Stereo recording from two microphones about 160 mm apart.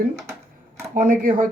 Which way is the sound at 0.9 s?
55° right (ahead or behind).